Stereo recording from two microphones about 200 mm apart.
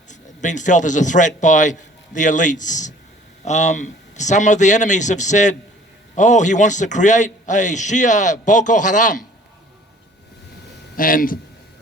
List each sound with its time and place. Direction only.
0.1 s a man's voice: 40° left (ahead or behind)
10.9 s speech: 45° left (ahead or behind)